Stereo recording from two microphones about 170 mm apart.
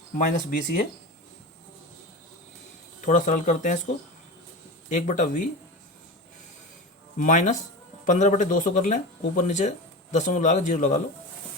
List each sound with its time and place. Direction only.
0.2 s speech: 50° left (ahead or behind)
3.0 s speech: 45° left (ahead or behind)
7.2 s speech: 45° left (ahead or behind)